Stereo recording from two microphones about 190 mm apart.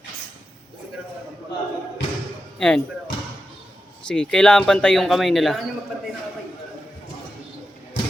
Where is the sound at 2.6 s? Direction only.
5° left (ahead or behind).